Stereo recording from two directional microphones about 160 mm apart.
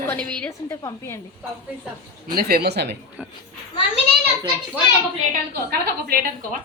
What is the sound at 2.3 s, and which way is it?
Speech, 75° right (ahead or behind).